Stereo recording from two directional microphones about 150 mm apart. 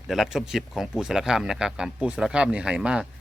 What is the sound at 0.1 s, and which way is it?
A man's voice, centre (ahead or behind).